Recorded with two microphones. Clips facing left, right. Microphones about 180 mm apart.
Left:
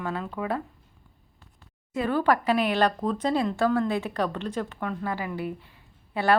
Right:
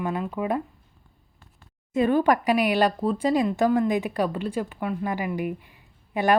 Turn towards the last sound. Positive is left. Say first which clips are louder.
# right 2 dB
turn(degrees=-15)  # may be behind; listen again after turning